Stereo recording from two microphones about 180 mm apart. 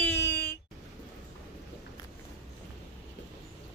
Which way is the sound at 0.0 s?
15° left (ahead or behind).